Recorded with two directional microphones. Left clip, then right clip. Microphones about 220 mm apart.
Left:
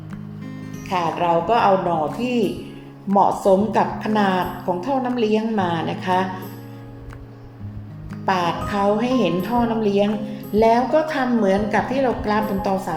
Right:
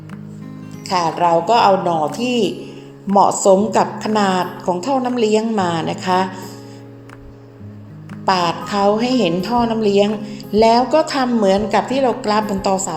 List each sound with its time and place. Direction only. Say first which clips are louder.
0.9 s a woman's voice: right 4 dB; 25° right (ahead or behind)
8.2 s a woman's voice: right 4 dB; 20° right (ahead or behind)